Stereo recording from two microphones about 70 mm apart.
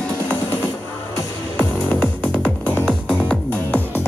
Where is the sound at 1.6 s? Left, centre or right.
Left.